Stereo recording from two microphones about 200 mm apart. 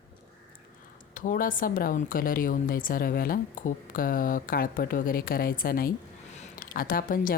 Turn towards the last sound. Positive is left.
turn(degrees=45)  # may be behind; listen again after turning